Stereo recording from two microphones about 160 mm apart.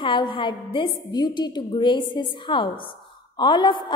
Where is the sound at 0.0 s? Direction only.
30° left (ahead or behind).